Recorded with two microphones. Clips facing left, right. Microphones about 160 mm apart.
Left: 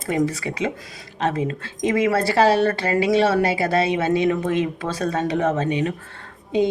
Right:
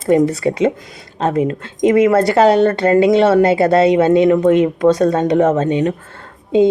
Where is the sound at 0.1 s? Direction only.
25° right (ahead or behind).